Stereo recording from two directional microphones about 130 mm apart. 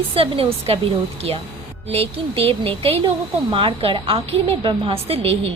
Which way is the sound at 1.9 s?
50° right (ahead or behind).